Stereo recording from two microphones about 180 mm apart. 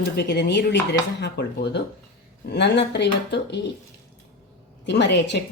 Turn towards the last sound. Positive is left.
turn(degrees=70)  # may be behind; listen again after turning